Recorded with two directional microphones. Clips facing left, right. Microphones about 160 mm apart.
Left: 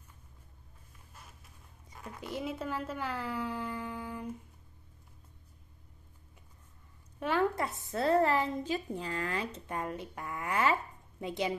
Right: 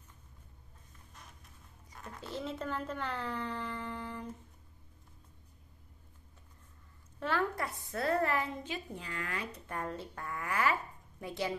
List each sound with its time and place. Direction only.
2.0 s speech: 10° left (ahead or behind)
7.2 s a woman's voice: 15° left (ahead or behind)